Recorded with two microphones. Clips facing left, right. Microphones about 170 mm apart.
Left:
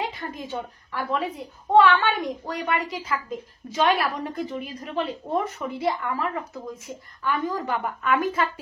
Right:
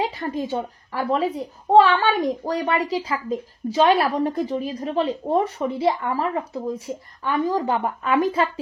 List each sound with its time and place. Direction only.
0.0 s a woman's voice: 35° right (ahead or behind)